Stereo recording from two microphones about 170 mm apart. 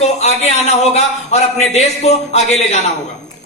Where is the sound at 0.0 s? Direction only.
40° left (ahead or behind).